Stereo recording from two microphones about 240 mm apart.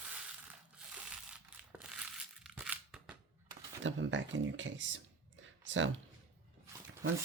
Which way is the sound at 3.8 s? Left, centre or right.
Right.